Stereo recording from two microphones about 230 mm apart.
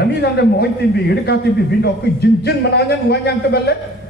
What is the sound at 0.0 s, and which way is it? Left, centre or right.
A man's voice, left.